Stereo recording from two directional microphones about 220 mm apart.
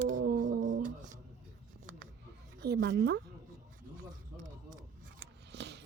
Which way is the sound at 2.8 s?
55° right (ahead or behind).